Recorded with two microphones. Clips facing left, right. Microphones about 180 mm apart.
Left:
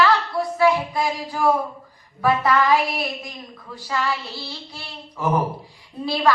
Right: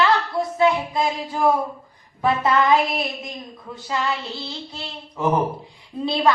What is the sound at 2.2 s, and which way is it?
Speech, 25° right (ahead or behind).